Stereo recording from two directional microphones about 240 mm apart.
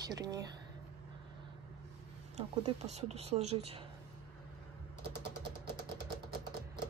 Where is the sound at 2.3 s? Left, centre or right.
Right.